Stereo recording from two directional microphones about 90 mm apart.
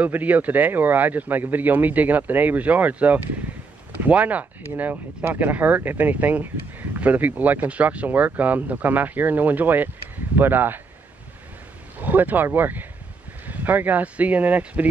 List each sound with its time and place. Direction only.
0.0 s speech: 20° right (ahead or behind)
12.0 s speech: 20° right (ahead or behind)